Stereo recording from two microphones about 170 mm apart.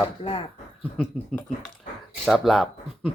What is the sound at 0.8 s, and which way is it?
Speech, 10° left (ahead or behind).